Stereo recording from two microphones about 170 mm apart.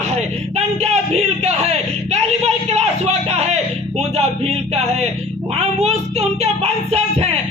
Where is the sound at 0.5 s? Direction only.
40° right (ahead or behind).